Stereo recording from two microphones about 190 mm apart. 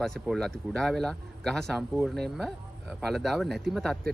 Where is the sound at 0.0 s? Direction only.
Centre (ahead or behind).